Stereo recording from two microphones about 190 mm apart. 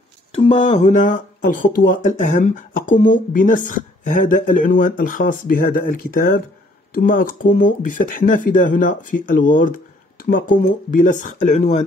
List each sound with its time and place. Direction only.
0.3 s speech: 30° left (ahead or behind)